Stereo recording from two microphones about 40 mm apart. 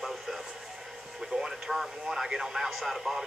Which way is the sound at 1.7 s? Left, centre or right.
Centre.